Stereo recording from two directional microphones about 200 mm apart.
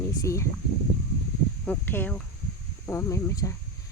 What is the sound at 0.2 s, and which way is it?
Speech, 15° left (ahead or behind).